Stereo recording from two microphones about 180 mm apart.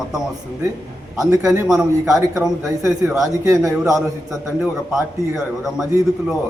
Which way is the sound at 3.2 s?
20° right (ahead or behind).